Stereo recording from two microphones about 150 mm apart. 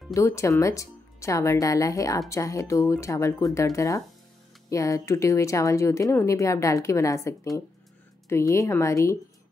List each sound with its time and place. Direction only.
0.1 s speech: 20° left (ahead or behind)